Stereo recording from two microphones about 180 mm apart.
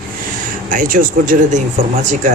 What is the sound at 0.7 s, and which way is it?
Speech, 50° right (ahead or behind).